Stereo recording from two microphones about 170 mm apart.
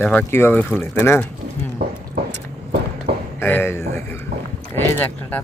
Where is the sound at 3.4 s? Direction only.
10° left (ahead or behind).